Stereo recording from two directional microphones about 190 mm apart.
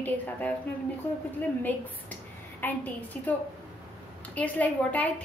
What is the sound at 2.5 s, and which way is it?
Speech, 10° left (ahead or behind).